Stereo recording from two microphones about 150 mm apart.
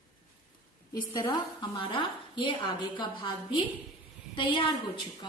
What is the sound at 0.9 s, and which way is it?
A woman's voice, 30° left (ahead or behind).